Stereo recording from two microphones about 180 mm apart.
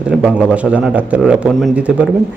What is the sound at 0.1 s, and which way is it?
A man's voice, 5° right (ahead or behind).